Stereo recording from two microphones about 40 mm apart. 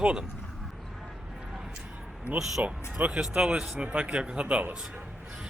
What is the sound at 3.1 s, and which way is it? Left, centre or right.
Speech, centre.